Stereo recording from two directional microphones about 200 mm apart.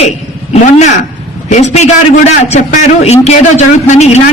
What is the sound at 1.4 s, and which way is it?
Speech, 35° left (ahead or behind).